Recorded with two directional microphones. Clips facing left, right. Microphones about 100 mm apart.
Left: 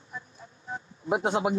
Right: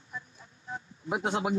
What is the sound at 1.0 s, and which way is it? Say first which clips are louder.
Speech: left 4 dB; 25° left (ahead or behind).